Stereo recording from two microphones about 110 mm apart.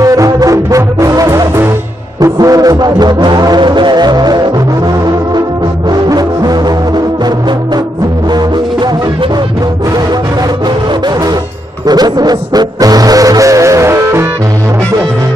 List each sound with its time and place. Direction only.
0.0 s music: 30° right (ahead or behind)
5.9 s music: 35° right (ahead or behind)
11.8 s music: 40° right (ahead or behind)